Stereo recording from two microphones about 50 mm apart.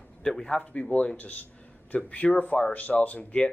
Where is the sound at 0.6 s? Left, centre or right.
Left.